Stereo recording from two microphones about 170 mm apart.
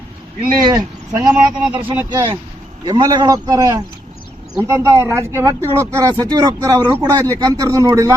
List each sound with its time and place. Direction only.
0.7 s speech: 20° right (ahead or behind)
1.3 s speech: 10° right (ahead or behind)